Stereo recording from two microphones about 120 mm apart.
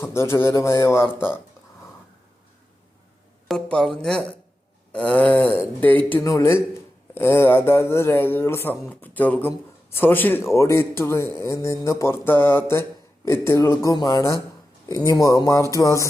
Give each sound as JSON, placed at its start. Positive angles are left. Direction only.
{"t": 0.0, "sound": "a man's voice", "side_deg": 20}
{"t": 3.5, "sound": "a man's voice", "side_deg": 5}